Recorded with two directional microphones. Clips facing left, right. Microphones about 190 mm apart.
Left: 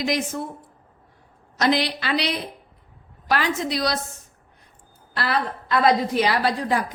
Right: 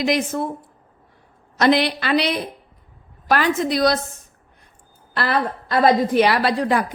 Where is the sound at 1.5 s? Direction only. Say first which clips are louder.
Right 4 dB; 60° right (ahead or behind).